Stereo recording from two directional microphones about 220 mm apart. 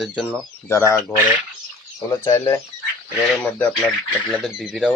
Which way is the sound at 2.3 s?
15° left (ahead or behind).